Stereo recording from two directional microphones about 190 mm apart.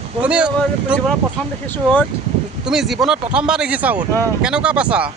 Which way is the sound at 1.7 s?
10° left (ahead or behind).